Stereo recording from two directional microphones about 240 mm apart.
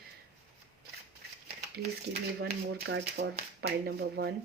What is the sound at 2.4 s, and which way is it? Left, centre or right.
Speech, right.